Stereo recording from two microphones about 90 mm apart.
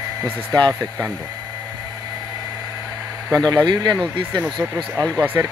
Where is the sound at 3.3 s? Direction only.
45° right (ahead or behind).